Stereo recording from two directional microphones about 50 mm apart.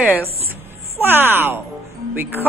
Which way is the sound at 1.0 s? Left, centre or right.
Right.